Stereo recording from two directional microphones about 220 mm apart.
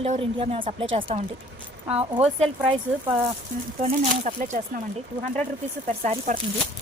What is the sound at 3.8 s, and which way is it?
Speech, 35° right (ahead or behind).